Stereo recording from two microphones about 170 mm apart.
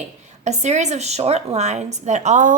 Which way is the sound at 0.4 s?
40° right (ahead or behind).